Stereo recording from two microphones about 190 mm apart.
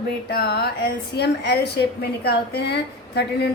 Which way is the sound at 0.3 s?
60° left (ahead or behind).